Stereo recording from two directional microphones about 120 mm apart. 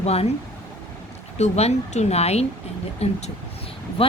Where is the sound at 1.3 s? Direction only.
65° left (ahead or behind).